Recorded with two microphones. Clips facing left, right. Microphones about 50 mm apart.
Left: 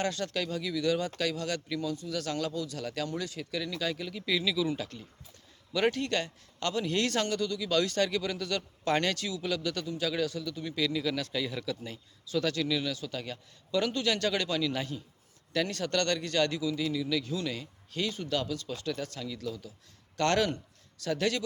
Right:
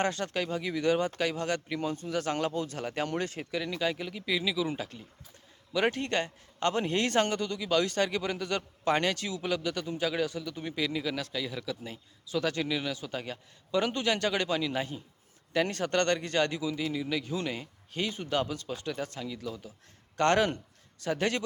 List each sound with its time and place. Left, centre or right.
0.0 s speech: right
1.8 s speech: right
3.5 s speech: right
11.3 s speech: centre; by 21.4 s right